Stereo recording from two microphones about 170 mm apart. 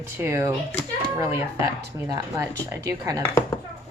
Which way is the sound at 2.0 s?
20° right (ahead or behind).